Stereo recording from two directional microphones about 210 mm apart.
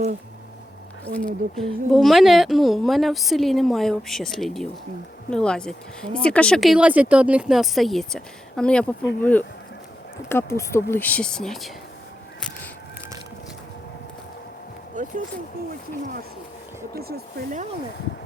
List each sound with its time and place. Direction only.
1.1 s a woman's voice: 5° left (ahead or behind)
10.2 s a woman's voice: 10° left (ahead or behind)
15.0 s speech: 40° right (ahead or behind)
16.9 s speech: 45° right (ahead or behind)